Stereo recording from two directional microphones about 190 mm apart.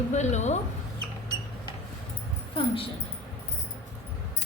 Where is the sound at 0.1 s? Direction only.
35° left (ahead or behind).